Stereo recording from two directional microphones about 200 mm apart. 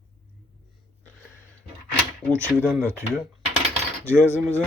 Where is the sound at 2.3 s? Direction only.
10° right (ahead or behind).